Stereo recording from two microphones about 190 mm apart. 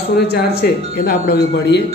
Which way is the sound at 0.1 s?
55° left (ahead or behind).